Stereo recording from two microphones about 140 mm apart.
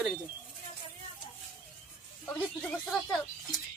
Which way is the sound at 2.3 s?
10° left (ahead or behind).